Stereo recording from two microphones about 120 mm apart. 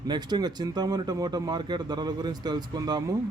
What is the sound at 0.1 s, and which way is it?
Speech, 35° right (ahead or behind).